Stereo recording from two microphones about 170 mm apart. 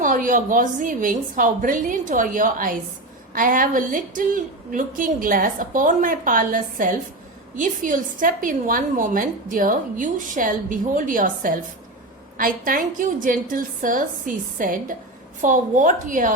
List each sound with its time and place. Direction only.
0.0 s a woman's voice: 50° right (ahead or behind)